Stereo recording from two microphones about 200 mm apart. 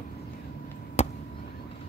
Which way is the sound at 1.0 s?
35° left (ahead or behind).